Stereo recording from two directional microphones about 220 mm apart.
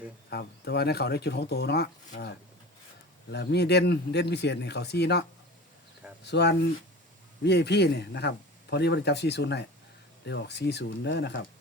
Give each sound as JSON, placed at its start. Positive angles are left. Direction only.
{"t": 0.3, "sound": "speech", "side_deg": 50}
{"t": 3.3, "sound": "speech", "side_deg": 50}
{"t": 6.2, "sound": "speech", "side_deg": 50}